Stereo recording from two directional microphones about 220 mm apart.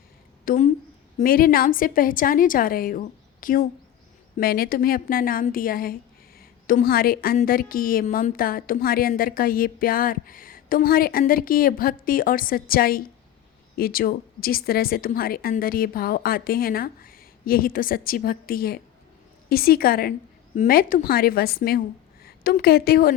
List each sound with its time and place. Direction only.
0.4 s a woman's voice: 35° left (ahead or behind)